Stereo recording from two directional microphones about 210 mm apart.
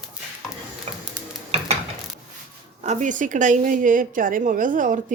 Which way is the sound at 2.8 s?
35° right (ahead or behind).